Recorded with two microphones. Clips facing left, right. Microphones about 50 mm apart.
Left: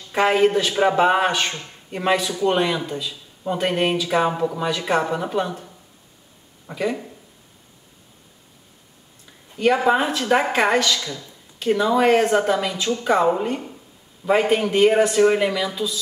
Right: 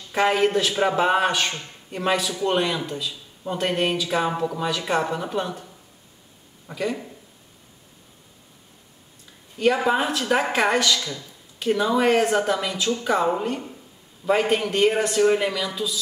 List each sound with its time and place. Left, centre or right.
0.1 s speech: centre
6.7 s speech: centre
9.6 s speech: centre